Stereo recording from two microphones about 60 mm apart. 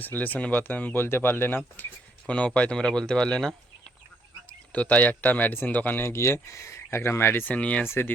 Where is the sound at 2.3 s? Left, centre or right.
Left.